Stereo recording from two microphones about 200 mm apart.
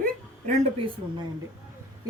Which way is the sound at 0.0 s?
40° right (ahead or behind).